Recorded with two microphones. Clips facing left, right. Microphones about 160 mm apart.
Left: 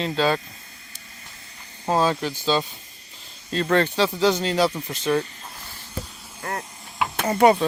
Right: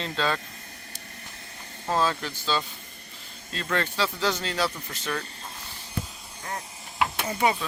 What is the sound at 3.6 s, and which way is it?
Speech, 40° left (ahead or behind).